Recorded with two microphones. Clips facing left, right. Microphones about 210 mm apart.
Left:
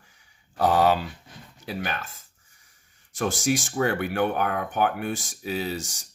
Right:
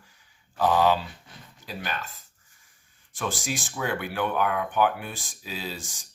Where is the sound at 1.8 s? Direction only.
50° left (ahead or behind).